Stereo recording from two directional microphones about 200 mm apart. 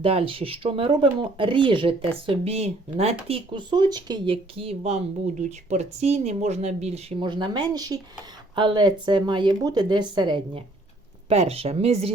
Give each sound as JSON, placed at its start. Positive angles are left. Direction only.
{"t": 0.0, "sound": "speech", "side_deg": -30}